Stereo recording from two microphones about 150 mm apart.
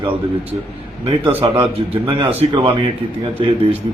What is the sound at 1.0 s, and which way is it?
Speech, 40° right (ahead or behind).